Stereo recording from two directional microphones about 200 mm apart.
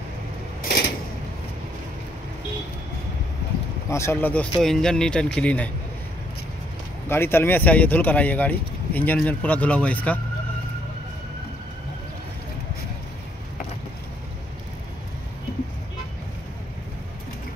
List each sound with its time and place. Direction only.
0.6 s a sound: 55° left (ahead or behind)
3.9 s speech: 15° left (ahead or behind)
7.1 s speech: 10° left (ahead or behind)